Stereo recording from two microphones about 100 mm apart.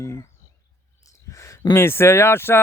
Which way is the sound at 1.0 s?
30° left (ahead or behind).